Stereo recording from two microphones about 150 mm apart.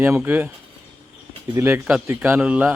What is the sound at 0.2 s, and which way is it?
Speech, 10° right (ahead or behind).